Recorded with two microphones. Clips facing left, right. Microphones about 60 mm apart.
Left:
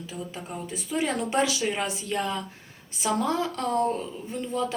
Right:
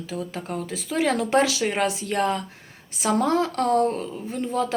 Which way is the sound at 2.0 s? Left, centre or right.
Right.